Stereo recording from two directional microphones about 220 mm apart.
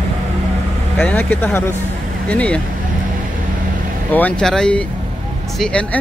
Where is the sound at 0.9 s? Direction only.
5° left (ahead or behind).